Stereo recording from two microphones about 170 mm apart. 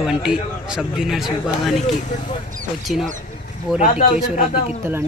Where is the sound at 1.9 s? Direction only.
45° left (ahead or behind).